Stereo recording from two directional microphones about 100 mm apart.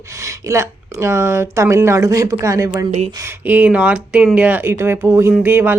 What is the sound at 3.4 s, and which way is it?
Speech, 15° right (ahead or behind).